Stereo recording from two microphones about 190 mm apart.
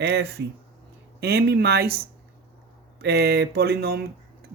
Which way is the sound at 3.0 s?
60° right (ahead or behind).